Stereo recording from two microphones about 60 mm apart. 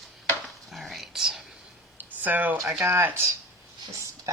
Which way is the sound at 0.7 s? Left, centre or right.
Centre.